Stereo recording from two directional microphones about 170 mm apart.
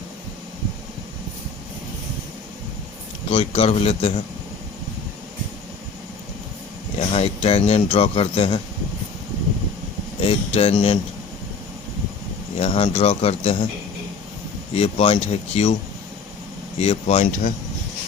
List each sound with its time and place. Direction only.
3.2 s speech: 35° left (ahead or behind)
7.1 s speech: 35° left (ahead or behind)
10.2 s speech: 35° left (ahead or behind)
12.5 s speech: 40° left (ahead or behind)
14.7 s speech: 35° left (ahead or behind)
16.7 s speech: 35° left (ahead or behind)